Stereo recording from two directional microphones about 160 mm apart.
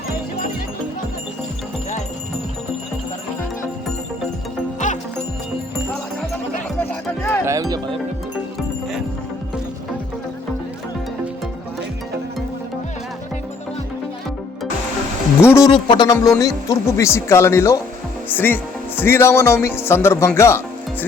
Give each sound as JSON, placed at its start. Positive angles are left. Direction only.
{"t": 7.2, "sound": "music", "side_deg": 15}
{"t": 7.4, "sound": "music", "side_deg": -20}
{"t": 15.4, "sound": "speech", "side_deg": 15}
{"t": 15.7, "sound": "music", "side_deg": 30}
{"t": 16.1, "sound": "speech", "side_deg": 20}